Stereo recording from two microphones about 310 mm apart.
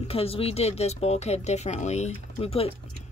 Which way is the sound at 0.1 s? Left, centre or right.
Centre.